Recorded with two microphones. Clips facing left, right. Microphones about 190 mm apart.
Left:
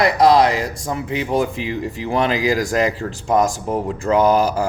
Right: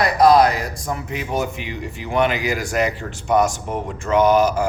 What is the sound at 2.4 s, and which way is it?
Speech, 90° left.